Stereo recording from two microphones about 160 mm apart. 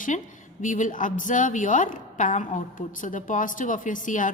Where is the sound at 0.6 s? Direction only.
55° left (ahead or behind).